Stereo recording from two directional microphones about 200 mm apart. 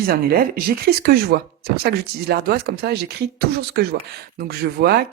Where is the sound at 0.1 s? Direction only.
50° right (ahead or behind).